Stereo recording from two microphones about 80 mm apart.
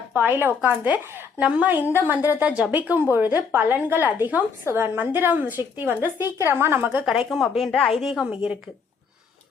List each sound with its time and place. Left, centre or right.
0.1 s speech: right
1.7 s speech: right
2.4 s speech: centre
7.0 s speech: centre
8.3 s speech: centre